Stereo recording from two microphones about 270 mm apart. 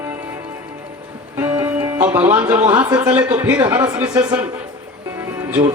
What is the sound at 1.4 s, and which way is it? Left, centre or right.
Speech, centre.